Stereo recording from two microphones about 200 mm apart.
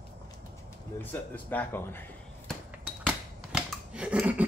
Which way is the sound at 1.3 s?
10° left (ahead or behind).